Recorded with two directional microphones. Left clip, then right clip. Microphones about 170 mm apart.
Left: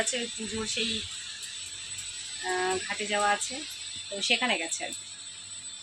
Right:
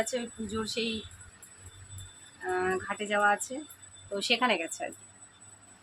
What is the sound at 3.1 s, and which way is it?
Speech, 10° right (ahead or behind).